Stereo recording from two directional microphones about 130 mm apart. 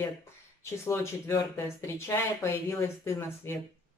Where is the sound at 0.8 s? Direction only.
20° left (ahead or behind).